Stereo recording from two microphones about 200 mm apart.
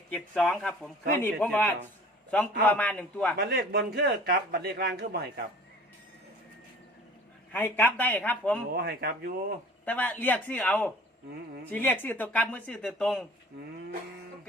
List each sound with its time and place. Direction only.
0.1 s a man's voice: 5° left (ahead or behind)
3.3 s speech: 50° right (ahead or behind)
7.5 s a man's voice: 10° left (ahead or behind)
8.7 s speech: 55° right (ahead or behind)
9.8 s a man's voice: 10° left (ahead or behind)